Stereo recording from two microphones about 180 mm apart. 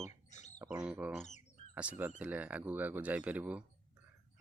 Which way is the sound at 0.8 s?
5° right (ahead or behind).